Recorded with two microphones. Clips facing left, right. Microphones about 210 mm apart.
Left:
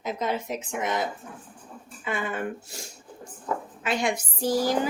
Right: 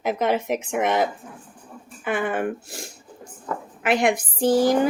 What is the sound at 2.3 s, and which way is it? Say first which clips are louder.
Speech: right 6 dB; 90° right.